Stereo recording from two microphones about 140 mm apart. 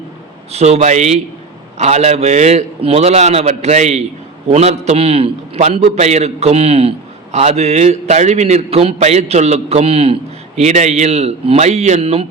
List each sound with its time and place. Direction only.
0.5 s a man's voice: 50° right (ahead or behind)